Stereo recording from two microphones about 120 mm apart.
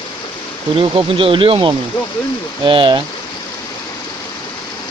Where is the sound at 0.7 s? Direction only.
50° right (ahead or behind).